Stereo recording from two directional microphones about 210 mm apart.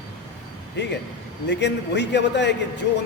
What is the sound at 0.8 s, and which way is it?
A man's voice, 55° left (ahead or behind).